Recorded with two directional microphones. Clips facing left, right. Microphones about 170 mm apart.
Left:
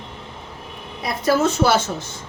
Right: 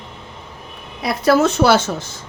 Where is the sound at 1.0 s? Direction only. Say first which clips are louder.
Right 4 dB; 80° right.